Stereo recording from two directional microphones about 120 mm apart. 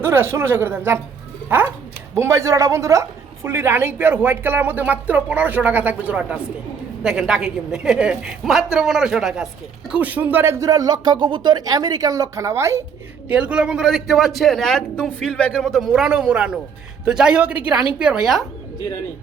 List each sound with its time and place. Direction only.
0.0 s a woman's voice: 20° right (ahead or behind); by 9.5 s 5° right (ahead or behind)
9.9 s speech: 15° right (ahead or behind)
13.3 s a man's voice: 10° right (ahead or behind)